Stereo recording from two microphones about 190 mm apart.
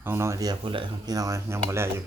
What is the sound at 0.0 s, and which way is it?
Speech, 15° right (ahead or behind).